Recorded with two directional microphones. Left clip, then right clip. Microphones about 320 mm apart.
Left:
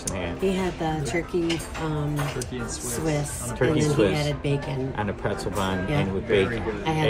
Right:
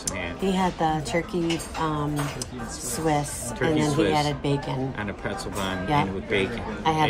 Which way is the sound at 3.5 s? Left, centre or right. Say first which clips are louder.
Left 1 dB; centre.